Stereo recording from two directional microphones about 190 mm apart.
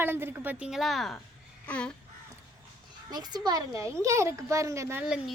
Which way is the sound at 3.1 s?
20° right (ahead or behind).